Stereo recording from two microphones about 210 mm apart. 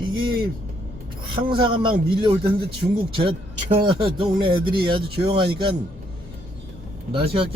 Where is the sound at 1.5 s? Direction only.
25° right (ahead or behind).